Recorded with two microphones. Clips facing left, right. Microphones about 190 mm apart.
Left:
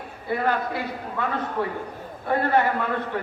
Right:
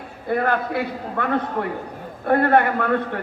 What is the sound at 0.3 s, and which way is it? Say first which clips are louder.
A man's voice: right 3 dB; 50° right (ahead or behind).